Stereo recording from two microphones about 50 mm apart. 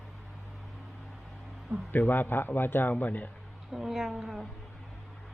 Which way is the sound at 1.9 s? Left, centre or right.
Left.